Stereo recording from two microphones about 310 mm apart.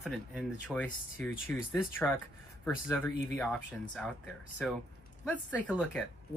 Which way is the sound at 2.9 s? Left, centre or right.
Centre.